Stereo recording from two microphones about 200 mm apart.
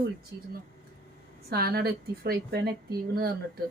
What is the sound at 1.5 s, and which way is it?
A woman's voice, 50° right (ahead or behind).